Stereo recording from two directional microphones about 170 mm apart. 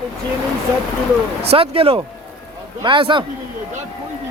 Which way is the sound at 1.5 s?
35° right (ahead or behind).